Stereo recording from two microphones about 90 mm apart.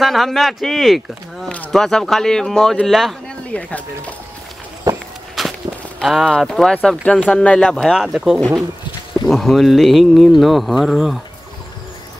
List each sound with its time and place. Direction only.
0.0 s speech: centre (ahead or behind)
3.5 s speech: 15° left (ahead or behind)
4.9 s walk: 40° right (ahead or behind)
5.4 s walk: centre (ahead or behind)
6.0 s speech: centre (ahead or behind)